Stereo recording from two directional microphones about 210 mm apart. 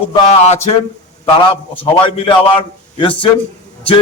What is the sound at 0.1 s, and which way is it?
Speech, 30° left (ahead or behind).